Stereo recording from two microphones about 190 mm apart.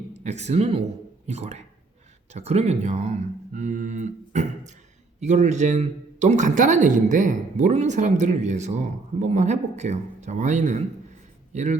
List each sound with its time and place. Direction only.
0.1 s speech: 35° right (ahead or behind)